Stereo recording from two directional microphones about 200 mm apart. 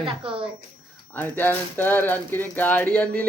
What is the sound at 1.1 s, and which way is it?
Speech, 10° left (ahead or behind).